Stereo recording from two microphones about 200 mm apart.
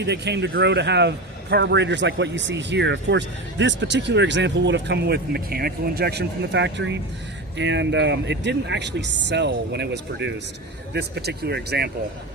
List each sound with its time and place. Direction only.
0.0 s a man's voice: 60° right (ahead or behind)